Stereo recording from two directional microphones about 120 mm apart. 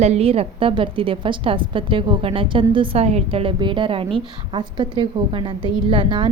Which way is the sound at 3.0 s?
60° right (ahead or behind).